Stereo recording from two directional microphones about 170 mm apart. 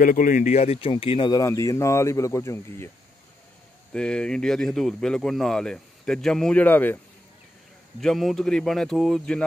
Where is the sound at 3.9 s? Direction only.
5° left (ahead or behind).